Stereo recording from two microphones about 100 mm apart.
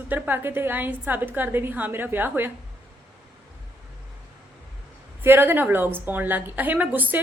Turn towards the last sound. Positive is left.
turn(degrees=-15)  # may be behind; listen again after turning